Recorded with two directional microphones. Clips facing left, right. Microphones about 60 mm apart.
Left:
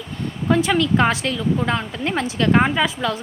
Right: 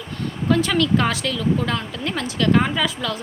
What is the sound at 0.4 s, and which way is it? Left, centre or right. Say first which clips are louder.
Speech: left 1 dB; left.